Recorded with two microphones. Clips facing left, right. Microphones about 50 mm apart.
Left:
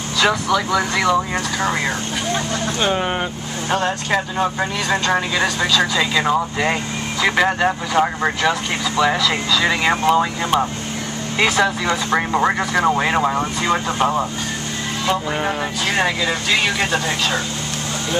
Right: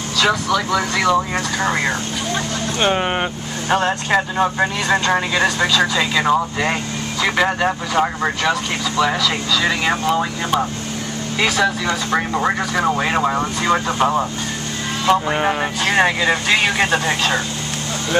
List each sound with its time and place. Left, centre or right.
0.3 s speech: centre
1.3 s speech: centre
2.8 s speech: right; by 9.9 s centre
10.0 s speech: left; by 14.2 s centre
15.2 s speech: centre